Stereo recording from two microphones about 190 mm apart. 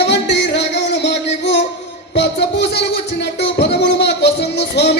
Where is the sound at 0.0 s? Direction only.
65° left (ahead or behind).